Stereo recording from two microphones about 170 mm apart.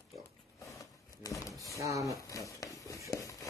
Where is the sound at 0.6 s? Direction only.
20° left (ahead or behind).